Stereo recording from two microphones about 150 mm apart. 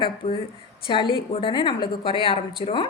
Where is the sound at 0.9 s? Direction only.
35° left (ahead or behind).